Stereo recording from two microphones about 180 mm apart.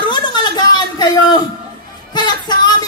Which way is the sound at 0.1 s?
25° left (ahead or behind).